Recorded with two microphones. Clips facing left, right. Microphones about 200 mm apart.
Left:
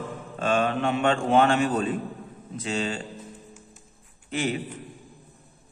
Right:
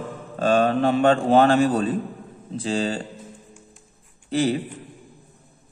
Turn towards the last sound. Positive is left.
turn(degrees=-35)  # may be behind; listen again after turning